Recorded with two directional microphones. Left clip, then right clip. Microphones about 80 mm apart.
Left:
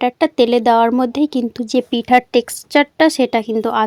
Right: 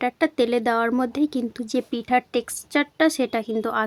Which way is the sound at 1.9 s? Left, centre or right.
Left.